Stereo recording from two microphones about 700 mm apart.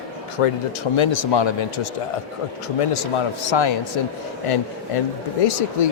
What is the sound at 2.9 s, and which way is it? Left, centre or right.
Speech, left.